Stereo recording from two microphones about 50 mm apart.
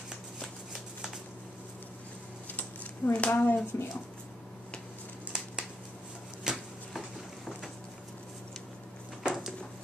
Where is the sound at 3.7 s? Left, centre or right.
Left.